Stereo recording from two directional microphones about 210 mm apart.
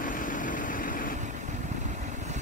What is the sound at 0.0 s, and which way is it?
Vehicle, 40° left (ahead or behind).